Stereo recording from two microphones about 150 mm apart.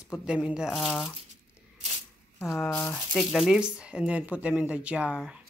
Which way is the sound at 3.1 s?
Centre (ahead or behind).